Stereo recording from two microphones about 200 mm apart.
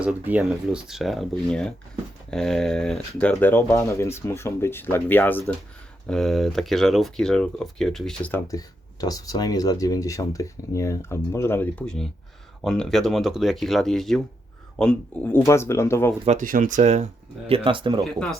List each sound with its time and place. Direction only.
0.0 s speech: 5° right (ahead or behind); by 16.1 s 10° left (ahead or behind)
16.2 s speech: 40° right (ahead or behind)
18.0 s speech: centre (ahead or behind)